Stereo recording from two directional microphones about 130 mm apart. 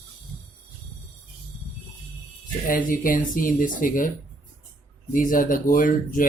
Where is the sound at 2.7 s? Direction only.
90° left.